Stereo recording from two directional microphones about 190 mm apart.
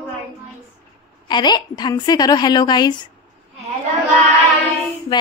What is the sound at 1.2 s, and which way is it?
A woman's voice, 25° left (ahead or behind).